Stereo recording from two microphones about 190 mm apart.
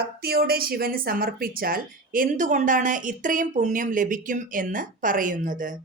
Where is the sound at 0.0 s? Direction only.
55° right (ahead or behind).